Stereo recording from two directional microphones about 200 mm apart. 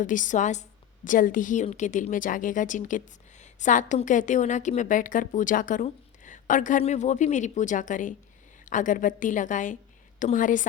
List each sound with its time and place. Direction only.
0.0 s a woman's voice: 40° left (ahead or behind)